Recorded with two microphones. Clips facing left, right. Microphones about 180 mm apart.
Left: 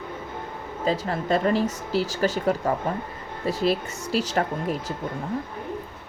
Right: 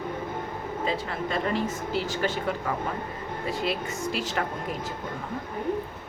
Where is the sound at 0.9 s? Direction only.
40° left (ahead or behind).